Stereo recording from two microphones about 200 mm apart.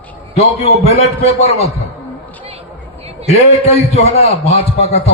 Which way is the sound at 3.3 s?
30° left (ahead or behind).